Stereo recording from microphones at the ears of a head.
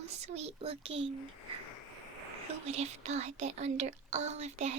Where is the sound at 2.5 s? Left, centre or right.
Right.